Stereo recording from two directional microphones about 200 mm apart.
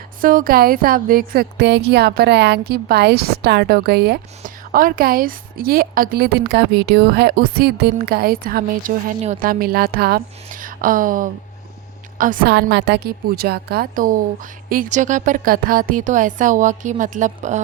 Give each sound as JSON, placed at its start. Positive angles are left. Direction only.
{"t": 0.2, "sound": "speech", "side_deg": -45}